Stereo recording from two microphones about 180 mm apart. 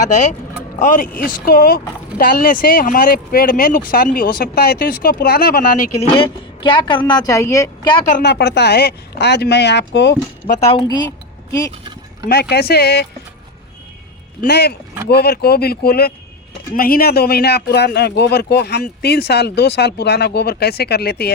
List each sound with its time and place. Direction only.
0.8 s speech: 45° left (ahead or behind)
6.0 s a woman's voice: 30° left (ahead or behind)
8.2 s speech: 65° left (ahead or behind)
10.7 s a woman's voice: 25° left (ahead or behind)
12.3 s speech: 65° left (ahead or behind)
14.4 s speech: 65° left (ahead or behind)